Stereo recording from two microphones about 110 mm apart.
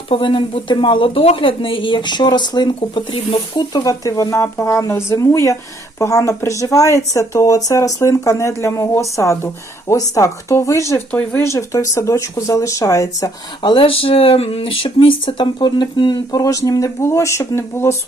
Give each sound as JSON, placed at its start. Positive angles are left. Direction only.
{"t": 0.1, "sound": "speech", "side_deg": 50}
{"t": 3.7, "sound": "speech", "side_deg": 35}
{"t": 11.1, "sound": "speech", "side_deg": 10}
{"t": 11.4, "sound": "speech", "side_deg": 30}
{"t": 13.6, "sound": "speech", "side_deg": 50}